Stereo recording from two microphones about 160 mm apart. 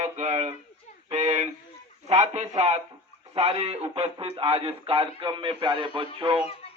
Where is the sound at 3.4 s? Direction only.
40° right (ahead or behind).